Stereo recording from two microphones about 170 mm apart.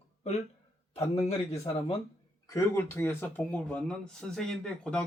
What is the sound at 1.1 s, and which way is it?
Speech, 35° left (ahead or behind).